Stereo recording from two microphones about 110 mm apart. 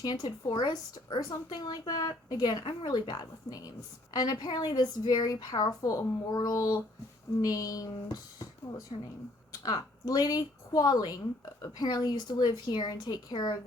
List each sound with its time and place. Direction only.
0.0 s a woman's voice: 40° left (ahead or behind)
8.9 s speech: 55° left (ahead or behind)
9.6 s a woman's voice: 35° left (ahead or behind)